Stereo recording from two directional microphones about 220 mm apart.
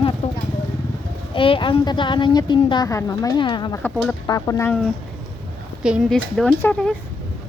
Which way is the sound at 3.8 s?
5° left (ahead or behind).